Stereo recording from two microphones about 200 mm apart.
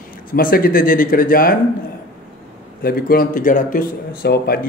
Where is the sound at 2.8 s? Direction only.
45° left (ahead or behind).